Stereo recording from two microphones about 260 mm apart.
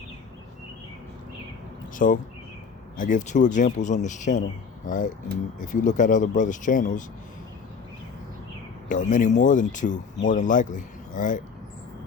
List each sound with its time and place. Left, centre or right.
2.0 s speech: left
8.9 s speech: left